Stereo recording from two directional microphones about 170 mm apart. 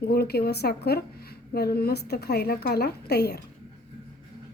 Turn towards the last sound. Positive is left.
turn(degrees=70)  # may be behind; listen again after turning